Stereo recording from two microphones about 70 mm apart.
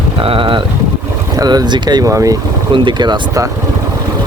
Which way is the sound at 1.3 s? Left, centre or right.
Right.